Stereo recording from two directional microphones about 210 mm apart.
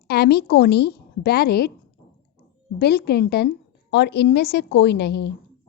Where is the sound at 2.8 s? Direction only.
50° left (ahead or behind).